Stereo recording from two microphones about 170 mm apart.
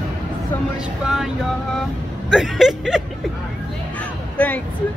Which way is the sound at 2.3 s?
Centre (ahead or behind).